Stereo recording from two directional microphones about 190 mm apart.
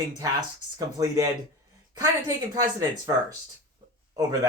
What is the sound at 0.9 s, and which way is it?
Speech, 20° right (ahead or behind).